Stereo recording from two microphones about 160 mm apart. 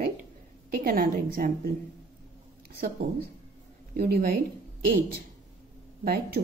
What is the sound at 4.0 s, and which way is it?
Speech, 70° right (ahead or behind).